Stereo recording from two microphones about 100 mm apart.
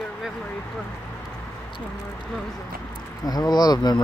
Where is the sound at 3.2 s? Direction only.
40° left (ahead or behind).